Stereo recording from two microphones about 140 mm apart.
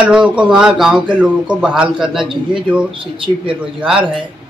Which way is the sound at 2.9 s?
40° right (ahead or behind).